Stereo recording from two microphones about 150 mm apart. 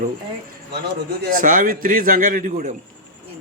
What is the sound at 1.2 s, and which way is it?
Speech, 70° right (ahead or behind).